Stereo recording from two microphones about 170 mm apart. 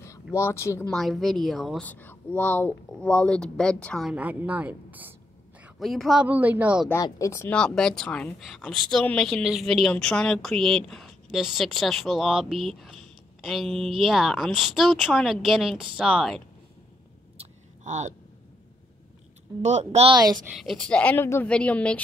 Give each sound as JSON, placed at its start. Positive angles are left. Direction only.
{"t": 0.0, "sound": "speech", "side_deg": 15}
{"t": 0.8, "sound": "a woman's voice", "side_deg": 0}
{"t": 4.1, "sound": "a woman's voice", "side_deg": -10}
{"t": 6.9, "sound": "a woman's voice", "side_deg": 20}
{"t": 17.4, "sound": "a sound", "side_deg": -45}
{"t": 19.6, "sound": "a woman's voice", "side_deg": -40}
{"t": 20.1, "sound": "a woman's voice", "side_deg": -25}
{"t": 20.4, "sound": "speech", "side_deg": 0}